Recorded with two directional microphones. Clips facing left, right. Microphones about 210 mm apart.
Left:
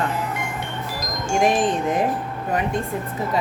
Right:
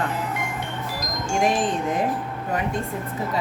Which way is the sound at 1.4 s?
20° left (ahead or behind).